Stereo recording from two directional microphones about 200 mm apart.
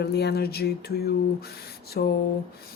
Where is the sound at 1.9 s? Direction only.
50° left (ahead or behind).